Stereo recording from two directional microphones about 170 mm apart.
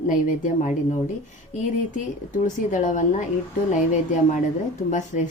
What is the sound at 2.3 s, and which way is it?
Speech, 50° left (ahead or behind).